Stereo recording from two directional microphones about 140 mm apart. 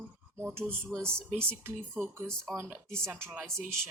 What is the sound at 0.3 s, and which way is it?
Speech, 15° right (ahead or behind).